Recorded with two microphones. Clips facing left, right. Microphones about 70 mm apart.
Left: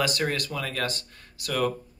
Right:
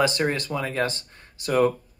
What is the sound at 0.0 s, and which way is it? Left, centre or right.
Speech, right.